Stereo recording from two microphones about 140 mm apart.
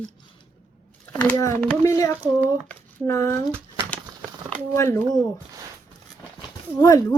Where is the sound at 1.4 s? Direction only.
20° left (ahead or behind).